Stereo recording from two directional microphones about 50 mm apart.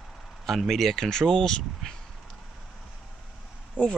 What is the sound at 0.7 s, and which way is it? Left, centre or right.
Speech, centre.